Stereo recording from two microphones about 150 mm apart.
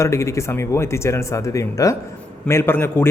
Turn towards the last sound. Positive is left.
turn(degrees=15)  # may be behind; listen again after turning